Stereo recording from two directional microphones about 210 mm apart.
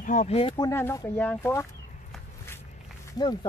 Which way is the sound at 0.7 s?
10° left (ahead or behind).